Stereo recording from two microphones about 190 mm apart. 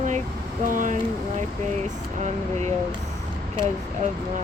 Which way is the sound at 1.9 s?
40° right (ahead or behind).